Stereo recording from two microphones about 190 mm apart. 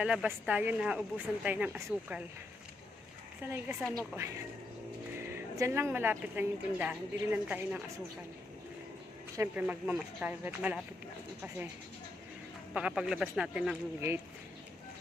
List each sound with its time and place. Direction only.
0.0 s a woman's voice: 5° right (ahead or behind)
3.4 s a woman's voice: 10° right (ahead or behind)
9.4 s a woman's voice: 10° right (ahead or behind)
12.7 s speech: 5° right (ahead or behind)